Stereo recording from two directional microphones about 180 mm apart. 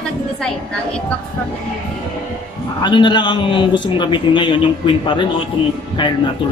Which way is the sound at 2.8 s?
25° left (ahead or behind).